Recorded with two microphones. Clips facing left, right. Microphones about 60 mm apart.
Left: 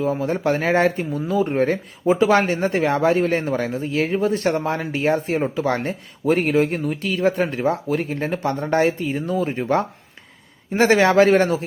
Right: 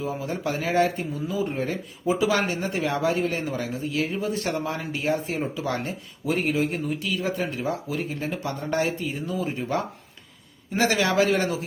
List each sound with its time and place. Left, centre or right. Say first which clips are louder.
0.0 s speech: left 7 dB; left
10.8 s speech: left 7 dB; left